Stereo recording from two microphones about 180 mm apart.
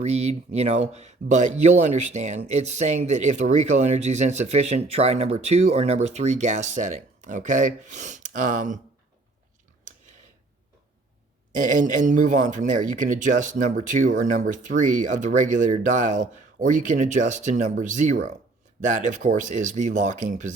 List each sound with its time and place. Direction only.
0.0 s speech: 35° right (ahead or behind)
11.5 s speech: 45° right (ahead or behind)